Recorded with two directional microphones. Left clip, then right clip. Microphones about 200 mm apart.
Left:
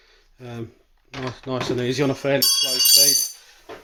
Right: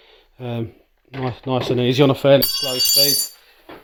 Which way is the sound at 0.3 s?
40° right (ahead or behind).